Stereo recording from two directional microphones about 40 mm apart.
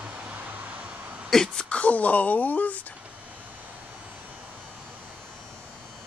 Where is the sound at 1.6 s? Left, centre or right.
Left.